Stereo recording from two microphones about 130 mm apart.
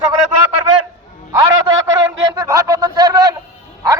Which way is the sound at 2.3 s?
25° right (ahead or behind).